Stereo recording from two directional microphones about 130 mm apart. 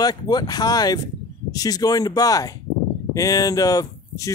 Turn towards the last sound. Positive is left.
turn(degrees=30)  # may be behind; listen again after turning